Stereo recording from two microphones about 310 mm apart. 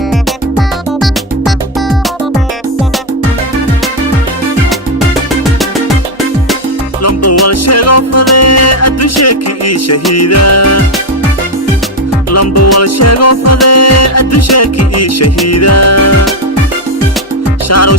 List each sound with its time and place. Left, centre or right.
0.9 s music: centre
7.0 s music: left
12.3 s music: left
17.7 s music: left